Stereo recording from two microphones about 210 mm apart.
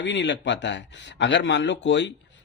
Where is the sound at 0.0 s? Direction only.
55° left (ahead or behind).